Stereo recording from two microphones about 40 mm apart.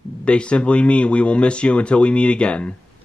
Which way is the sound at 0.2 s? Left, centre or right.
Left.